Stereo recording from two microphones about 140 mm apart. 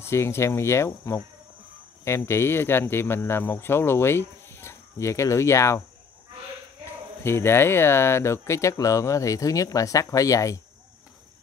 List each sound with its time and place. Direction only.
0.0 s speech: 20° left (ahead or behind)
7.2 s speech: 15° left (ahead or behind)